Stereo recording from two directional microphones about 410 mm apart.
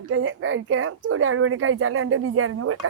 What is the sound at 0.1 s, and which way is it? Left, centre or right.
A woman's voice, right.